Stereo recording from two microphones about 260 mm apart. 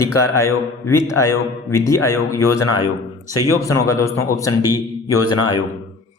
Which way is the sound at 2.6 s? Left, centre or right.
Left.